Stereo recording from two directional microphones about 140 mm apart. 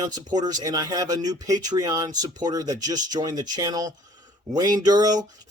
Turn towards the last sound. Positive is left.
turn(degrees=-30)  # may be behind; listen again after turning